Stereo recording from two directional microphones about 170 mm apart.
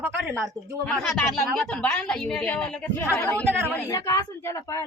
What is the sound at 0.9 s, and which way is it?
A woman's voice, 5° left (ahead or behind).